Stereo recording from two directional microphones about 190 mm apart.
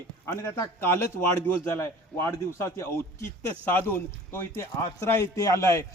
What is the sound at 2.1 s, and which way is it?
Speech, 15° left (ahead or behind).